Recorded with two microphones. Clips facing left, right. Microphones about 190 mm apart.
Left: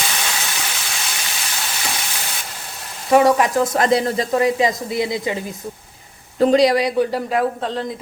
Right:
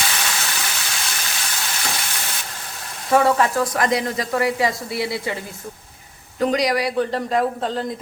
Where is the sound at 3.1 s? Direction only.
15° left (ahead or behind).